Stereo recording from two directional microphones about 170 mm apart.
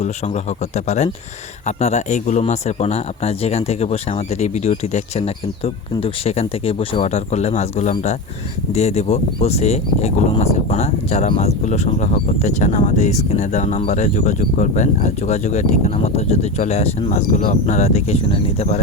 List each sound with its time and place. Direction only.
0.9 s a man's voice: 40° left (ahead or behind)